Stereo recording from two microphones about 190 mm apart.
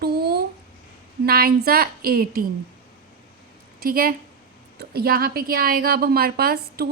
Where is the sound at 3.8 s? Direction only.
50° right (ahead or behind).